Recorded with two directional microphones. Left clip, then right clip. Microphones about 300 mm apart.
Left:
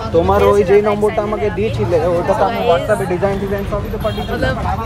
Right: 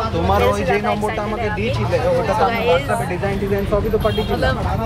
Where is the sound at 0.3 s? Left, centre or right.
Left.